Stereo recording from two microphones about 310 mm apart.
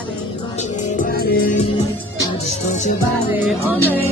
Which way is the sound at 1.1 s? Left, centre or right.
Left.